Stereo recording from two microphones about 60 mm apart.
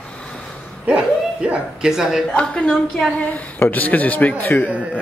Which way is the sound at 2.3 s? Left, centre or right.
Centre.